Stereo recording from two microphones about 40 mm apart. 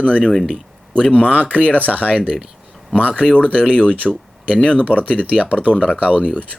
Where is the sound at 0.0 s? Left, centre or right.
Left.